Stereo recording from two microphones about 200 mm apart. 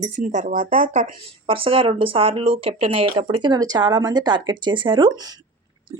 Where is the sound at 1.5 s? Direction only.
25° right (ahead or behind).